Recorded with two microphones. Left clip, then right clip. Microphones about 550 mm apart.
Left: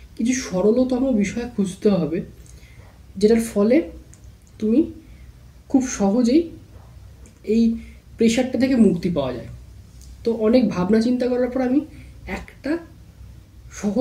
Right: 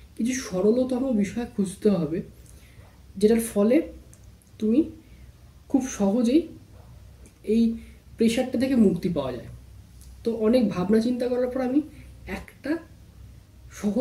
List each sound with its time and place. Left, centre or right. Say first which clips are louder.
0.2 s speech: left 4 dB; right
5.7 s speech: left 4 dB; right
7.4 s speech: left 4 dB; right
12.3 s a sound: left 4 dB; right